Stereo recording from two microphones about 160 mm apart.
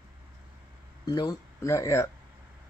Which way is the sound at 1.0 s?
25° left (ahead or behind).